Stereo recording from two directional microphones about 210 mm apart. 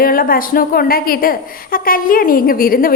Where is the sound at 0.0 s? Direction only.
45° left (ahead or behind).